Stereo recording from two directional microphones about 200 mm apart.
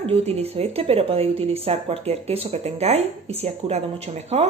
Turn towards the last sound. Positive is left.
turn(degrees=-30)  # may be behind; listen again after turning